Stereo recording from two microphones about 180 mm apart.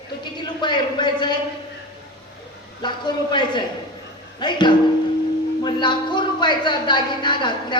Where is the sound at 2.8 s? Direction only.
25° left (ahead or behind).